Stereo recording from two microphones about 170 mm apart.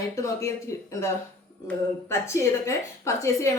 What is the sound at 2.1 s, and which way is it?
A woman's voice, 15° left (ahead or behind).